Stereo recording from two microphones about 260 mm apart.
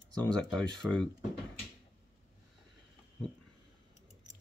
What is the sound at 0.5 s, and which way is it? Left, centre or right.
Speech, centre.